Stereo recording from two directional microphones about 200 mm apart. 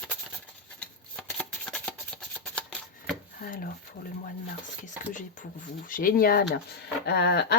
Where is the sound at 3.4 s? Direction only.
45° left (ahead or behind).